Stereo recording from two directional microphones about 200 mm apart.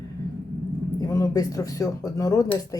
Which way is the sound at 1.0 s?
15° left (ahead or behind).